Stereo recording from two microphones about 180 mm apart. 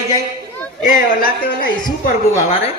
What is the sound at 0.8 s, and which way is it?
Speech, 50° left (ahead or behind).